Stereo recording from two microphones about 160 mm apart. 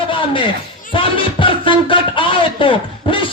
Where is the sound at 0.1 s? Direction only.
30° left (ahead or behind).